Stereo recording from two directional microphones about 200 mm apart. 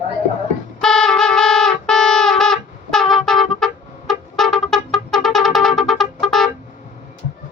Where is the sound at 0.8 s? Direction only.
5° left (ahead or behind).